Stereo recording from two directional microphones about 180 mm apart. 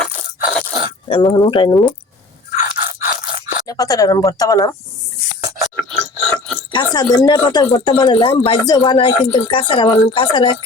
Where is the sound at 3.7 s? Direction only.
20° left (ahead or behind).